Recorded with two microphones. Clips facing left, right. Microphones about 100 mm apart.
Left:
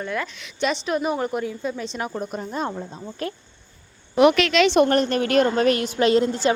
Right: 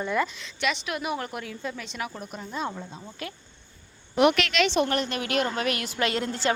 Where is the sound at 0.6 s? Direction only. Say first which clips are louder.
Left 6 dB; 35° left (ahead or behind).